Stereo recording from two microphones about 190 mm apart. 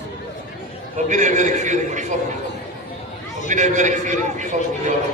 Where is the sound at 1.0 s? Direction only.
40° right (ahead or behind).